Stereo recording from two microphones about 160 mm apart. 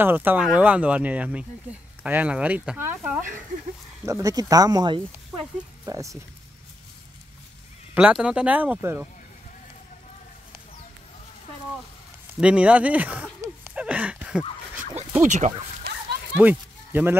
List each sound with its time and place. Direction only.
0.0 s speech: 10° right (ahead or behind)
7.9 s speech: 5° right (ahead or behind)
12.4 s speech: 5° right (ahead or behind)
13.4 s a sound: 10° right (ahead or behind)
15.2 s speech: 45° right (ahead or behind)
16.3 s speech: 10° right (ahead or behind)